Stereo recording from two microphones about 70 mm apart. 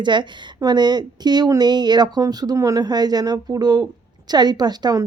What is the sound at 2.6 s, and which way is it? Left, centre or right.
A woman's voice, right.